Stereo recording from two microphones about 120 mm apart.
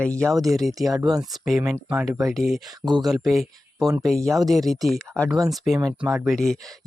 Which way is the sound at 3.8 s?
30° right (ahead or behind).